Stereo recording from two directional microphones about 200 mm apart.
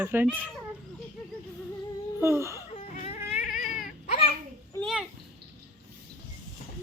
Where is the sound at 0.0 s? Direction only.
10° right (ahead or behind).